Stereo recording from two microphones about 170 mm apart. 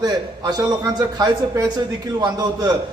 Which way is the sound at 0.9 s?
20° right (ahead or behind).